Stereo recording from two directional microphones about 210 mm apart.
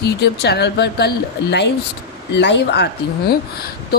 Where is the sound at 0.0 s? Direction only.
50° left (ahead or behind).